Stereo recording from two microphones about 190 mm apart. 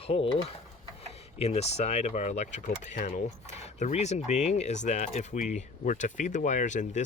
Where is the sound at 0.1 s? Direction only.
30° left (ahead or behind).